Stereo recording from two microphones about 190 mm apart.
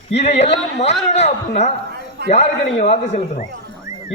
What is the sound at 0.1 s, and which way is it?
A man's voice, 35° left (ahead or behind).